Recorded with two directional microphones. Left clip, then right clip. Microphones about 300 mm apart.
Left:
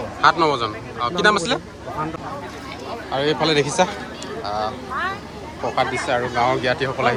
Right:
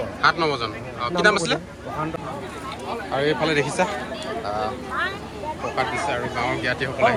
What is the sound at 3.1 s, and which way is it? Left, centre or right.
Speech, centre.